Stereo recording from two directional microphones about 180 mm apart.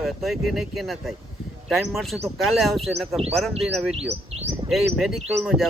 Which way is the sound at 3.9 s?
35° right (ahead or behind).